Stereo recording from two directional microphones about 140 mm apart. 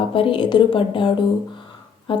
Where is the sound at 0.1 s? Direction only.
40° left (ahead or behind).